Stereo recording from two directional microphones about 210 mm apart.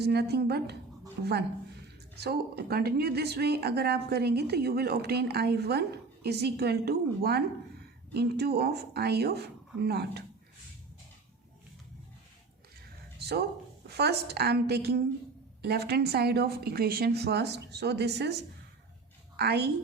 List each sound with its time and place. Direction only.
0.0 s speech: 50° right (ahead or behind)
13.1 s a sound: 50° right (ahead or behind)
13.8 s speech: 50° right (ahead or behind)